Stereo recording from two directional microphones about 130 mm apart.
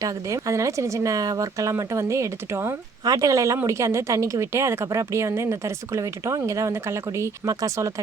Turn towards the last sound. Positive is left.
turn(degrees=-25)  # may be behind; listen again after turning